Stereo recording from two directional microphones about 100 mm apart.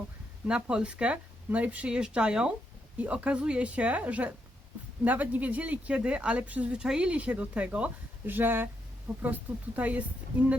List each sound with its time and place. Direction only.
0.4 s speech: 10° right (ahead or behind)